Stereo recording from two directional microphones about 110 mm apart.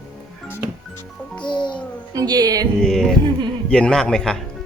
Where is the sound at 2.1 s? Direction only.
35° right (ahead or behind).